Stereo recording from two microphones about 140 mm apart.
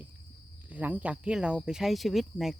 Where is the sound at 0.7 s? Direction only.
10° right (ahead or behind).